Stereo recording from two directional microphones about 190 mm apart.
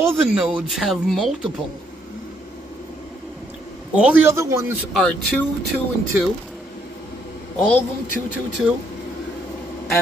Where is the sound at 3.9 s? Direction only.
5° right (ahead or behind).